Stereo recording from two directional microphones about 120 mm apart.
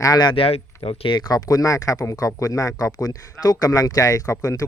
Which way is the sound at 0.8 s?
55° left (ahead or behind).